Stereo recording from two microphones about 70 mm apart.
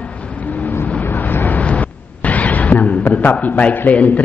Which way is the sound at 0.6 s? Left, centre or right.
Left.